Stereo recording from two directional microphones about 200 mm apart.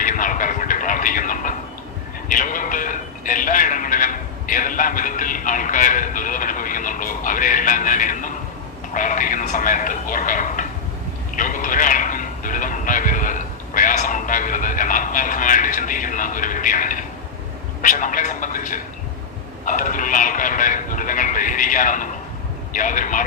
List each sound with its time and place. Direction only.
0.0 s a sound: 40° left (ahead or behind)
8.9 s speech: 40° left (ahead or behind)
11.3 s music: 40° left (ahead or behind)
17.8 s speech: 40° left (ahead or behind)